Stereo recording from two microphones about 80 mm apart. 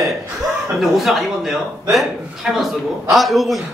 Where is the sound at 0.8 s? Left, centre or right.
Centre.